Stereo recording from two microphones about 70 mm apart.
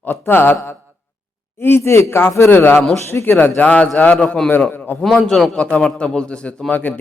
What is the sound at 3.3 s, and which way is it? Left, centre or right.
Speech, left.